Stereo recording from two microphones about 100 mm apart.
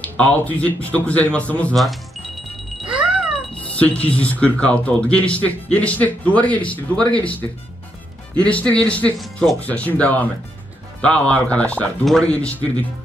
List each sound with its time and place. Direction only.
0.0 s speech: 15° left (ahead or behind)
1.8 s music: centre (ahead or behind)
2.9 s cat: 10° right (ahead or behind)
3.7 s speech: 15° left (ahead or behind)
9.2 s speech: centre (ahead or behind)
9.6 s speech: 15° left (ahead or behind)
12.0 s speech: 5° left (ahead or behind)